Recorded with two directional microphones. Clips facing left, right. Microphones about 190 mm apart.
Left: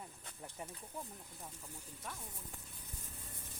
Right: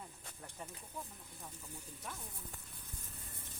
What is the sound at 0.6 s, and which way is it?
Speech, 15° left (ahead or behind).